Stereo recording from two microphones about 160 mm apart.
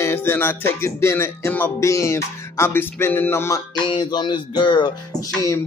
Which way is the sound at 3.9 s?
30° left (ahead or behind).